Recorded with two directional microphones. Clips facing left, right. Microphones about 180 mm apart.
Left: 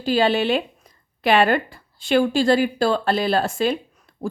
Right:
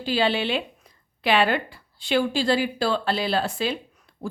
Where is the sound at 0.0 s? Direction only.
45° left (ahead or behind).